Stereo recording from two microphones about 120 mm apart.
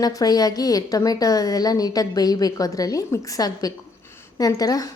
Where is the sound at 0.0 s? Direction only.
30° left (ahead or behind).